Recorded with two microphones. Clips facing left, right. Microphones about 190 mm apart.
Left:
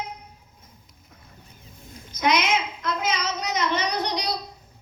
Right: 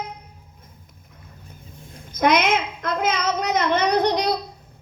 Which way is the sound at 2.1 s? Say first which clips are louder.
Right 4 dB; 55° right (ahead or behind).